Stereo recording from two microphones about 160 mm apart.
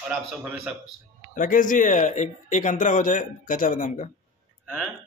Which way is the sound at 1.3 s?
55° left (ahead or behind).